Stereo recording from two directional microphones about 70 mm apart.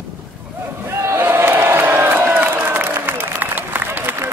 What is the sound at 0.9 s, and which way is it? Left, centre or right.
Crowd, right.